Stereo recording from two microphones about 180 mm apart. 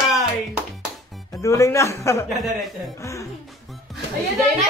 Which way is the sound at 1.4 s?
15° left (ahead or behind).